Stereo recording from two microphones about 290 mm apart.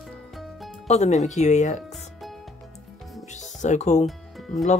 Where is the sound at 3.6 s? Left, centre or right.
Left.